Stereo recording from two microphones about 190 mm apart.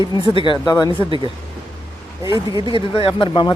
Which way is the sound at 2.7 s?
30° left (ahead or behind).